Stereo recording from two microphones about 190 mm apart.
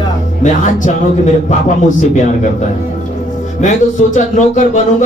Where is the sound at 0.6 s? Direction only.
40° left (ahead or behind).